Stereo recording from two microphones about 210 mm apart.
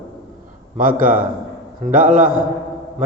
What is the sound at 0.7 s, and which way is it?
A man's voice, 40° right (ahead or behind).